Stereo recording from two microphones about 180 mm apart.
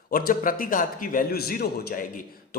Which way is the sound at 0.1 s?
55° left (ahead or behind).